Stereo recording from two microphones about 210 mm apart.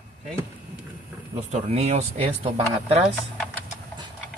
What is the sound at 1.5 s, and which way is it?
Speech, 30° right (ahead or behind).